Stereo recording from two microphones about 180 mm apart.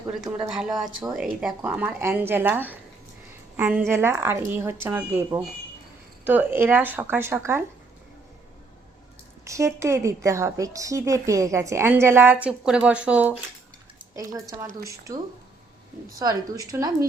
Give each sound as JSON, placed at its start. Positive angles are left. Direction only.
{"t": 0.4, "sound": "a woman's voice", "side_deg": -5}
{"t": 9.4, "sound": "a woman's voice", "side_deg": -15}
{"t": 14.2, "sound": "a woman's voice", "side_deg": -20}